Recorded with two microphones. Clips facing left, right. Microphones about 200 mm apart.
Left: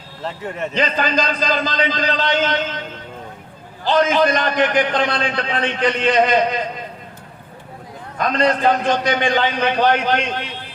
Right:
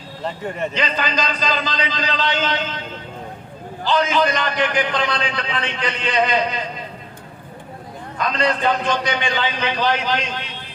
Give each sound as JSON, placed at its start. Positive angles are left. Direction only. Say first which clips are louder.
{"t": 0.2, "sound": "speech", "louder": "right 1 dB", "side_deg": 0}
{"t": 0.7, "sound": "a man's voice", "louder": "left 3 dB", "side_deg": 45}
{"t": 3.8, "sound": "a man's voice", "louder": "left 3 dB", "side_deg": 50}
{"t": 8.2, "sound": "a man's voice", "louder": "left 3 dB", "side_deg": 50}